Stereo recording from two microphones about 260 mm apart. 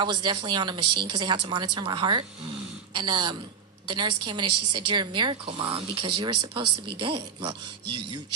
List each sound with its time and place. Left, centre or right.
0.0 s speech: centre